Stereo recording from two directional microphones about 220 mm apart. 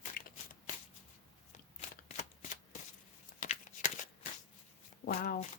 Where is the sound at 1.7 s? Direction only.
35° left (ahead or behind).